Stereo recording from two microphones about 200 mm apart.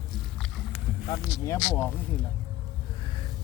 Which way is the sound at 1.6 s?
5° left (ahead or behind).